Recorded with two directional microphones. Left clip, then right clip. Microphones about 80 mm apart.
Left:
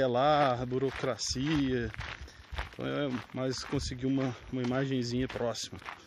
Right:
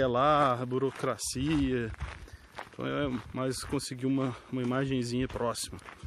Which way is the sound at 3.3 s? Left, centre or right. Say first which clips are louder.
Right 1 dB; right.